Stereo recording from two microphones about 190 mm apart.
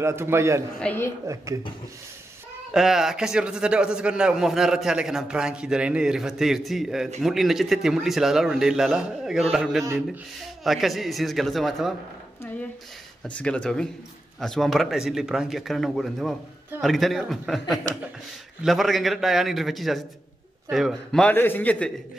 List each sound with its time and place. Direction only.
0.0 s a man's voice: 15° right (ahead or behind)
0.7 s a man's voice: 10° left (ahead or behind)
1.2 s a man's voice: 15° right (ahead or behind)
2.7 s a man's voice: centre (ahead or behind)
13.4 s a man's voice: 5° left (ahead or behind)